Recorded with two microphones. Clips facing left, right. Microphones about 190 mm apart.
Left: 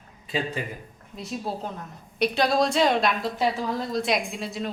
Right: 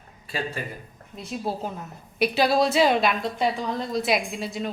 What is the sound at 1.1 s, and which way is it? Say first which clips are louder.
A woman's voice: right 1 dB; centre (ahead or behind).